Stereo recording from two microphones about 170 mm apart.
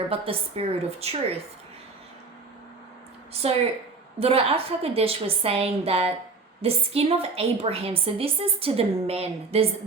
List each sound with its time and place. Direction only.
0.1 s a woman's voice: 35° right (ahead or behind)
3.4 s a woman's voice: 35° right (ahead or behind)